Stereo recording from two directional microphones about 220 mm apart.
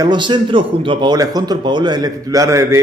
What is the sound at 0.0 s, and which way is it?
A man's voice, 20° right (ahead or behind).